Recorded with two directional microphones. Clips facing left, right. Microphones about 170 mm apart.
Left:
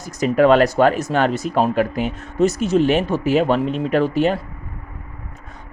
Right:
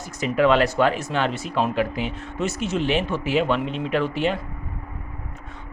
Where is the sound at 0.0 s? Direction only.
40° left (ahead or behind).